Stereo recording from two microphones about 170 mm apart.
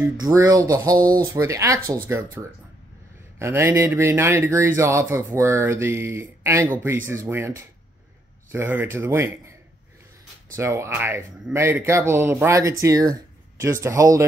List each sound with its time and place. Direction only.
0.0 s speech: 20° right (ahead or behind)
3.3 s speech: 15° right (ahead or behind)